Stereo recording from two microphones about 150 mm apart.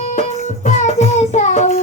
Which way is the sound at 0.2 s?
50° left (ahead or behind).